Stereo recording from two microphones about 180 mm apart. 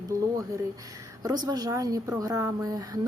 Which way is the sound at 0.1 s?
15° right (ahead or behind).